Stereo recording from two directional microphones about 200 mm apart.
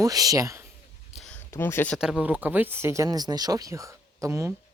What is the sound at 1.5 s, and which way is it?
Speech, 10° left (ahead or behind).